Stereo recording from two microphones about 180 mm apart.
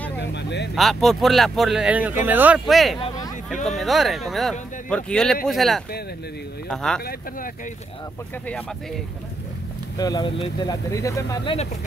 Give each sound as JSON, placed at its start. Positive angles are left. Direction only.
{"t": 0.2, "sound": "vehicle", "side_deg": 70}
{"t": 0.7, "sound": "speech", "side_deg": 0}
{"t": 7.1, "sound": "speech", "side_deg": 50}
{"t": 9.9, "sound": "speech", "side_deg": 20}
{"t": 11.5, "sound": "speech", "side_deg": 40}